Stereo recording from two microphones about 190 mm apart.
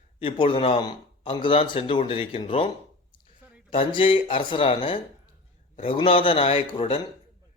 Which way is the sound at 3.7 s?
30° left (ahead or behind).